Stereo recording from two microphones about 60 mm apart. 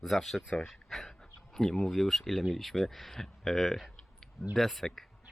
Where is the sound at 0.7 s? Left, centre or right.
Centre.